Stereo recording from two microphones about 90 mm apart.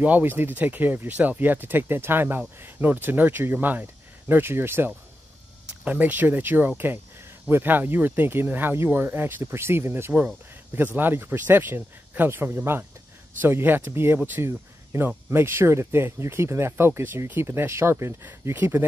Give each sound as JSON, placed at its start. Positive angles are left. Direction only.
{"t": 0.0, "sound": "speech", "side_deg": -20}